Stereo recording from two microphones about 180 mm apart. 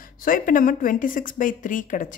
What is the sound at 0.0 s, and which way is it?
A woman's voice, 50° left (ahead or behind).